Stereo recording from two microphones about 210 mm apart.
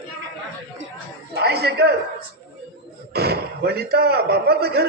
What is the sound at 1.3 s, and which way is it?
Music, 50° right (ahead or behind).